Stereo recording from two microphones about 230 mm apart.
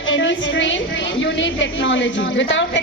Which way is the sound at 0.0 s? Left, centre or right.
Left.